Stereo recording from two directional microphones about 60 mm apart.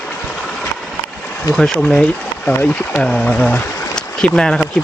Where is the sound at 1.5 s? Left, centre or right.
Centre.